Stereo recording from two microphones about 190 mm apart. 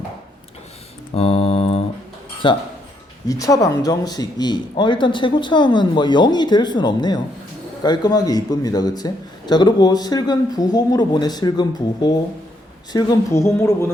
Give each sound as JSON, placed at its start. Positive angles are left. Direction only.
{"t": 1.1, "sound": "mantra", "side_deg": 30}
{"t": 2.4, "sound": "a man's voice", "side_deg": 25}